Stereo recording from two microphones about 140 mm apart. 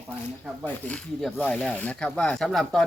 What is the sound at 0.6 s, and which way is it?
Speech, 5° left (ahead or behind).